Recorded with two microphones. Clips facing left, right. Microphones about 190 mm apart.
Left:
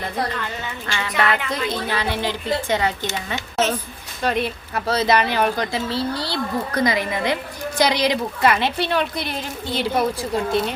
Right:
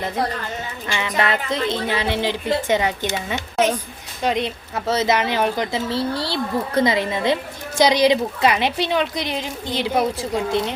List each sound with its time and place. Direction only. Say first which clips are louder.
0.9 s music: right 3 dB; 20° right (ahead or behind)
1.5 s a woman's voice: right 2 dB; 25° right (ahead or behind)